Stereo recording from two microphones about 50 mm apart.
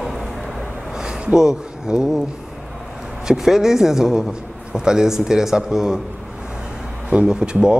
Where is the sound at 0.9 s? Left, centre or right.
Centre.